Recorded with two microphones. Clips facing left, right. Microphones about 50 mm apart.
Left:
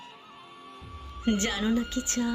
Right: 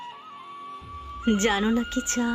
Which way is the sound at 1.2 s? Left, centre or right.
Right.